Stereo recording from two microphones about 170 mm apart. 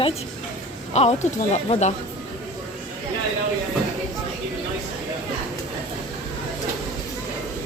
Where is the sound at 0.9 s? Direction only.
40° left (ahead or behind).